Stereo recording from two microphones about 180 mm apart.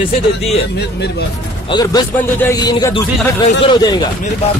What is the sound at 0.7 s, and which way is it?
Speech, 65° left (ahead or behind).